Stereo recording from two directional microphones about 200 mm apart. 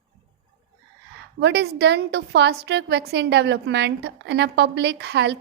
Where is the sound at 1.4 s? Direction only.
55° right (ahead or behind).